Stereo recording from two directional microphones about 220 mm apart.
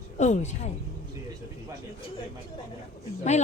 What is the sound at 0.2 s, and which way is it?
Speech, 30° left (ahead or behind).